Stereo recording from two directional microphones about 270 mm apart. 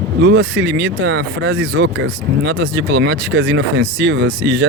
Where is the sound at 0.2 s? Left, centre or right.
Right.